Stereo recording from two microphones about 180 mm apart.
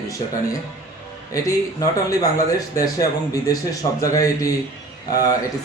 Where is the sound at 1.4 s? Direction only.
20° left (ahead or behind).